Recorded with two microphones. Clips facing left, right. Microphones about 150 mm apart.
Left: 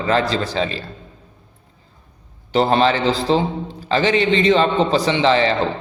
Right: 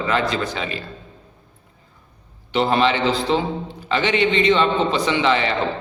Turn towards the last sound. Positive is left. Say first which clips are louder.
# left 3 dB
turn(degrees=35)  # may be behind; listen again after turning